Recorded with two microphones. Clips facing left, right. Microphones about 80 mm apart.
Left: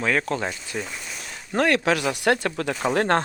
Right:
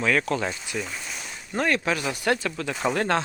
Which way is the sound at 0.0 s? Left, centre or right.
Left.